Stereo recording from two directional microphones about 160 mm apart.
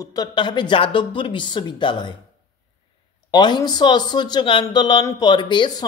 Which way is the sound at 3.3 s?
25° left (ahead or behind).